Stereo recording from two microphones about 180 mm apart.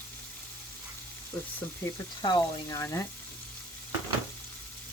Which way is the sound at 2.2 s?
20° left (ahead or behind).